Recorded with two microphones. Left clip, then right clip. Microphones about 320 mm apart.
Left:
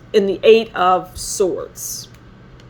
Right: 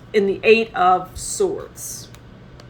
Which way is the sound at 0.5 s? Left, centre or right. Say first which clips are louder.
Left 2 dB; left.